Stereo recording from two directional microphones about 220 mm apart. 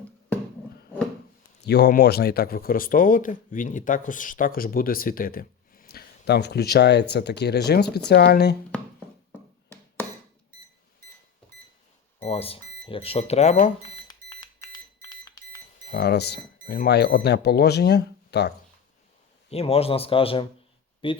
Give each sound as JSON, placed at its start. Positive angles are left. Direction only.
{"t": 1.6, "sound": "speech", "side_deg": 45}
{"t": 12.2, "sound": "speech", "side_deg": 25}
{"t": 14.1, "sound": "alarm clock", "side_deg": 20}
{"t": 15.9, "sound": "speech", "side_deg": 45}
{"t": 19.5, "sound": "speech", "side_deg": 25}